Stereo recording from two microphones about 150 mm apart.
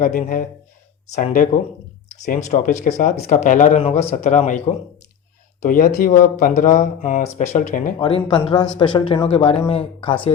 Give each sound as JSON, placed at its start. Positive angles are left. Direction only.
{"t": 0.0, "sound": "speech", "side_deg": 60}
{"t": 5.6, "sound": "speech", "side_deg": 65}
{"t": 7.9, "sound": "speech", "side_deg": 30}